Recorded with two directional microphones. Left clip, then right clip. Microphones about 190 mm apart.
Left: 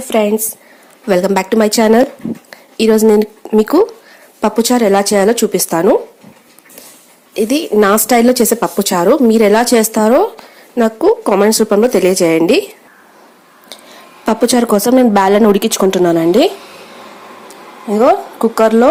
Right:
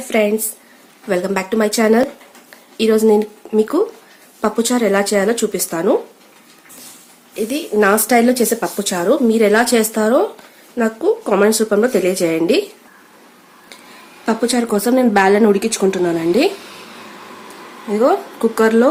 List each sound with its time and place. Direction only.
0.0 s a woman's voice: 25° left (ahead or behind)
7.3 s a woman's voice: 35° left (ahead or behind)
14.3 s a woman's voice: 35° left (ahead or behind)
17.9 s speech: 25° left (ahead or behind)